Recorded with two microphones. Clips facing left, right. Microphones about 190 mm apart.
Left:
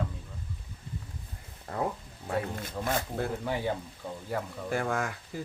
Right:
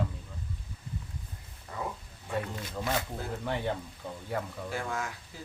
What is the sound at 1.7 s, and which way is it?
Speech, 60° left (ahead or behind).